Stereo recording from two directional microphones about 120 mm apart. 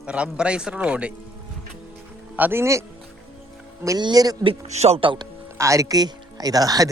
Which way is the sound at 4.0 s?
35° right (ahead or behind).